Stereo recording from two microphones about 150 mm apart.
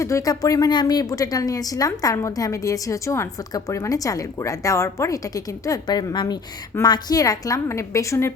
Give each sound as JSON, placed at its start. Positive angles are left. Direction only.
{"t": 0.0, "sound": "a woman's voice", "side_deg": 20}